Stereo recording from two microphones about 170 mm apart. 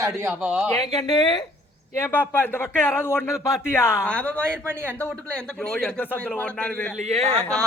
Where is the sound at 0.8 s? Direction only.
25° left (ahead or behind).